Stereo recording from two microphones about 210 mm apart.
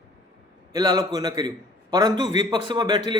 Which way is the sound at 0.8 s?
20° right (ahead or behind).